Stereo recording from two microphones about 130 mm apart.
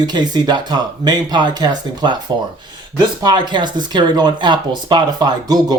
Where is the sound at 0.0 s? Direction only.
35° right (ahead or behind).